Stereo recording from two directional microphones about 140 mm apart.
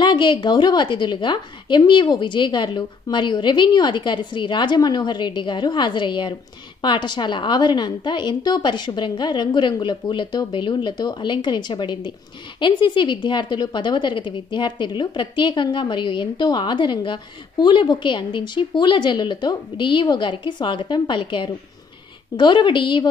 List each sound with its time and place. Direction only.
0.0 s a woman's voice: 35° left (ahead or behind)